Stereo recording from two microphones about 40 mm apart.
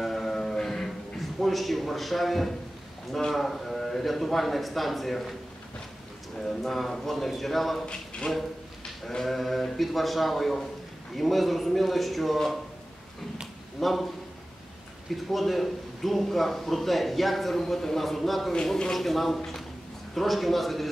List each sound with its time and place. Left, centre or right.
0.0 s music: centre
1.4 s a man's voice: centre
6.3 s a man's voice: centre
7.8 s speech: left
9.2 s a man's voice: centre
13.7 s a man's voice: centre
15.3 s a man's voice: centre